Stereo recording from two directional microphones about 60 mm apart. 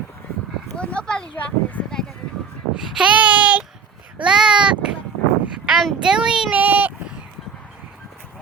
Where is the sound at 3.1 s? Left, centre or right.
Right.